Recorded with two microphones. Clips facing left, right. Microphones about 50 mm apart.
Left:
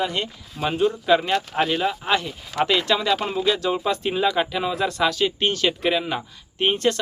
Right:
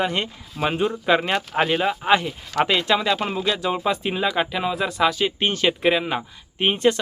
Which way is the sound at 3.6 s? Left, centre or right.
Centre.